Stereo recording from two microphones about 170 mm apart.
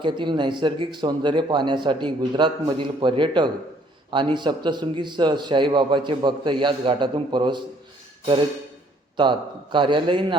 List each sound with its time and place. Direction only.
0.0 s speech: 30° right (ahead or behind)
9.2 s speech: 25° right (ahead or behind)